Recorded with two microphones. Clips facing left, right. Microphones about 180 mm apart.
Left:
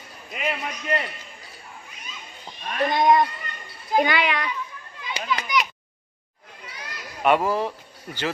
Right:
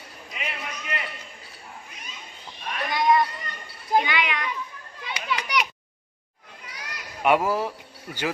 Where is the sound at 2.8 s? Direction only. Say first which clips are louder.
Left 3 dB; 50° left (ahead or behind).